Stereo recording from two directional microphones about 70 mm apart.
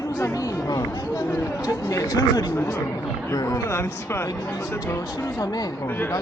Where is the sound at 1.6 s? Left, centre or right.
Left.